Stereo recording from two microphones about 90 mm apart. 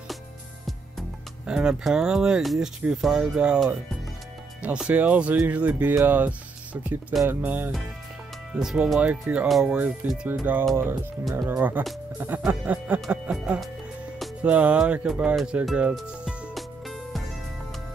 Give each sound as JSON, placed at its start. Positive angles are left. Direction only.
{"t": 0.7, "sound": "music", "side_deg": -5}
{"t": 3.0, "sound": "speech", "side_deg": -5}
{"t": 3.5, "sound": "speech", "side_deg": 0}
{"t": 4.6, "sound": "speech", "side_deg": -15}
{"t": 8.5, "sound": "speech", "side_deg": -5}
{"t": 9.5, "sound": "speech", "side_deg": -5}
{"t": 10.2, "sound": "speech", "side_deg": -20}
{"t": 15.9, "sound": "music", "side_deg": 0}